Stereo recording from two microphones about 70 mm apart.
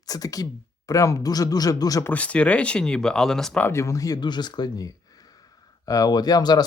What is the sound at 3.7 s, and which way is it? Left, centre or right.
Speech, left.